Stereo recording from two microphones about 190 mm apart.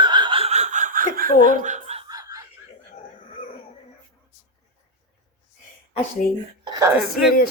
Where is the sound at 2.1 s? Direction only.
20° right (ahead or behind).